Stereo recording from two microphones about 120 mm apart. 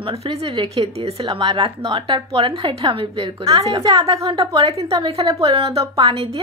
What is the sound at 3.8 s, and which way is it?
Speech, 35° right (ahead or behind).